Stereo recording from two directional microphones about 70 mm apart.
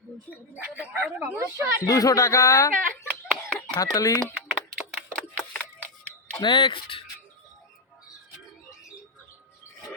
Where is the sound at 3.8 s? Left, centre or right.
Left.